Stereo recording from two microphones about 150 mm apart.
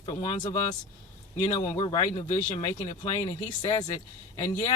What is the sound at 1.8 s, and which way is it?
Speech, 35° left (ahead or behind).